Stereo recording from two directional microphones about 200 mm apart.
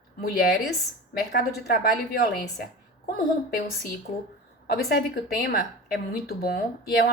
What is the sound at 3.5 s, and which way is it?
A woman's voice, 45° left (ahead or behind).